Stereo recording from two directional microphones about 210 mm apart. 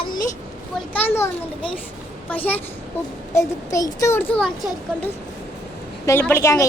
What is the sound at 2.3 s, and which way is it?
A child's voice, 10° left (ahead or behind).